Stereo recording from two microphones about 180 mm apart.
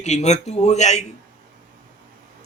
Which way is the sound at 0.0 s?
40° left (ahead or behind).